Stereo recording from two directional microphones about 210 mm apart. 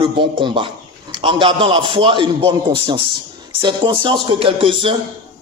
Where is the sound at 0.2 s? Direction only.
25° right (ahead or behind).